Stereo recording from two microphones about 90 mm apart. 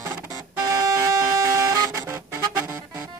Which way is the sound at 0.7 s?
35° right (ahead or behind).